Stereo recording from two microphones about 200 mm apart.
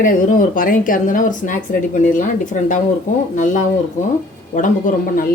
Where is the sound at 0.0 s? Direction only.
40° left (ahead or behind).